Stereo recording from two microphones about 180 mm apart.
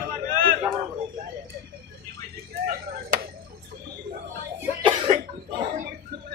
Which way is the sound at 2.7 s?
55° right (ahead or behind).